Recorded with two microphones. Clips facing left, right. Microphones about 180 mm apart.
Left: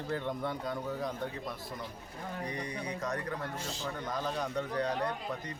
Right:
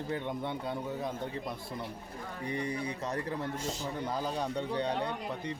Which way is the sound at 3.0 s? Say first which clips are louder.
Right 1 dB; 30° right (ahead or behind).